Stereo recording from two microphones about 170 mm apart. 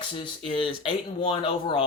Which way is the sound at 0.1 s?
30° left (ahead or behind).